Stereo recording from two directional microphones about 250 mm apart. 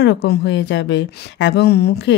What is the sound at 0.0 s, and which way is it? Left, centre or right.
A woman's voice, left.